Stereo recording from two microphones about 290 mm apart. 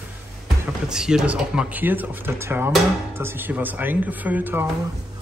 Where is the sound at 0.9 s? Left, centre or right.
Centre.